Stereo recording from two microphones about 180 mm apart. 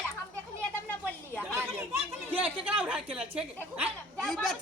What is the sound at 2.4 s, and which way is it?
Speech, 30° right (ahead or behind).